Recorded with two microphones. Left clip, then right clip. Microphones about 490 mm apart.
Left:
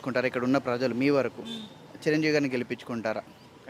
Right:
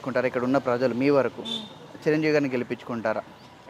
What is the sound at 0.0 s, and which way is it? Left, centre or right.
Speech, centre.